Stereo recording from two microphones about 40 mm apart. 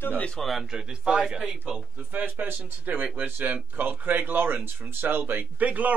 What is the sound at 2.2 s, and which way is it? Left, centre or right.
A man's voice, right.